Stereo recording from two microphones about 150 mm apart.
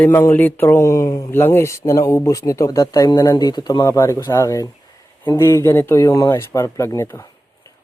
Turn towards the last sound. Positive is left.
turn(degrees=20)  # may be behind; listen again after turning